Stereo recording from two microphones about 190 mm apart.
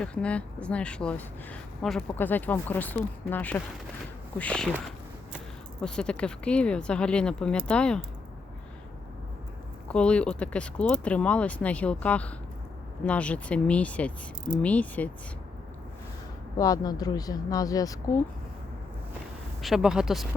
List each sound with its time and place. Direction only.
0.0 s speech: 5° left (ahead or behind)
5.8 s speech: 5° left (ahead or behind)
9.9 s speech: 5° left (ahead or behind)
16.6 s speech: 20° left (ahead or behind)
19.6 s speech: centre (ahead or behind)